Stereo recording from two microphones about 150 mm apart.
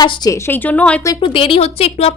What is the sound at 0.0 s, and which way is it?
A woman's voice, 25° left (ahead or behind).